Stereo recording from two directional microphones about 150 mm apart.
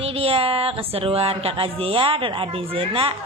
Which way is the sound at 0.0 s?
40° right (ahead or behind).